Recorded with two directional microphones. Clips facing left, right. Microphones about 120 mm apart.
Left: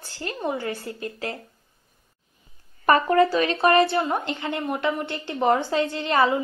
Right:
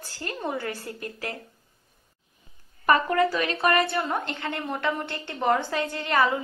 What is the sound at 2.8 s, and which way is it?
A woman's voice, 35° left (ahead or behind).